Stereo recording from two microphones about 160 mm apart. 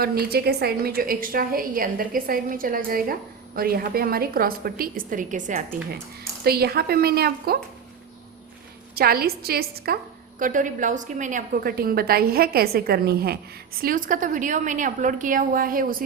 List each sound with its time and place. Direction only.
0.0 s a woman's voice: 75° right (ahead or behind); by 6.0 s 55° right (ahead or behind)
6.4 s a woman's voice: 75° right (ahead or behind)
9.0 s a woman's voice: 70° right (ahead or behind)
10.4 s a woman's voice: 55° right (ahead or behind)
11.6 s a woman's voice: 70° right (ahead or behind)